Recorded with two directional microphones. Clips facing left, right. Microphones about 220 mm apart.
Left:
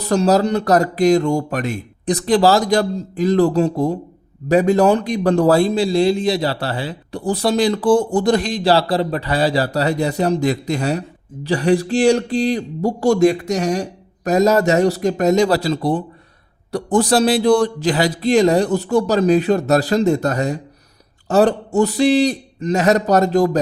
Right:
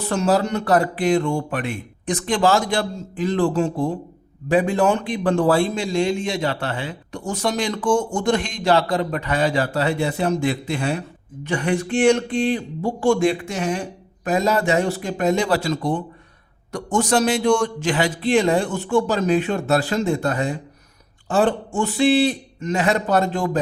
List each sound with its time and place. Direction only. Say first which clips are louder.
0.0 s speech: left 4 dB; 40° left (ahead or behind)